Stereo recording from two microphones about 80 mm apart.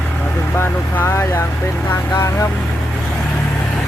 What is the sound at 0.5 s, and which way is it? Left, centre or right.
Vehicle, left.